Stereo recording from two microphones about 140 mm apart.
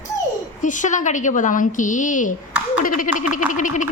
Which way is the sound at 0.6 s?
65° left (ahead or behind).